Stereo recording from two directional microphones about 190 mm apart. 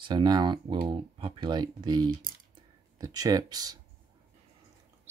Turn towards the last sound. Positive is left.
turn(degrees=-20)  # may be behind; listen again after turning